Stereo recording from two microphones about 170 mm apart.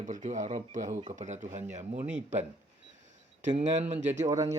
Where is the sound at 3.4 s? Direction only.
45° right (ahead or behind).